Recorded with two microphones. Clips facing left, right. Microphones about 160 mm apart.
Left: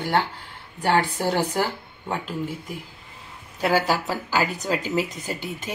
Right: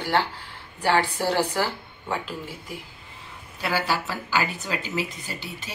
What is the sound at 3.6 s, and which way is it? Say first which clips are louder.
Speech: left 5 dB; 45° left (ahead or behind).